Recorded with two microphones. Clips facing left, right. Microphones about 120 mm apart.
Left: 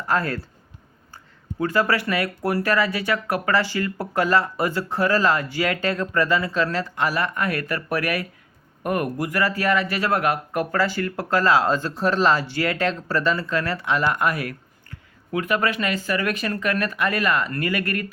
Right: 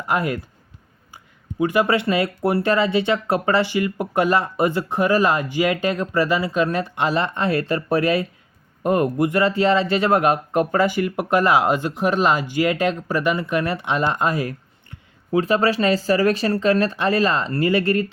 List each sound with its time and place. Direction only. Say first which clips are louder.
0.1 s speech: right 1 dB; 15° right (ahead or behind)